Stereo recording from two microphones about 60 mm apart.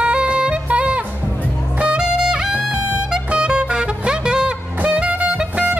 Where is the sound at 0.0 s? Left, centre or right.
Centre.